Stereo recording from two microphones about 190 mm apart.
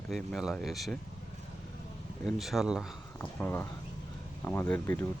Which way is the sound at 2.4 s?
Centre (ahead or behind).